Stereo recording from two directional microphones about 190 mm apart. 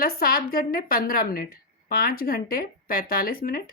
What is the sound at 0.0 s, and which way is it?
A woman's voice, 50° left (ahead or behind).